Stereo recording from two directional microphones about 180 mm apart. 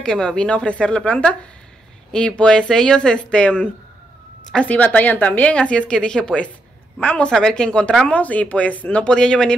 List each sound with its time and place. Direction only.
0.0 s speech: 5° left (ahead or behind)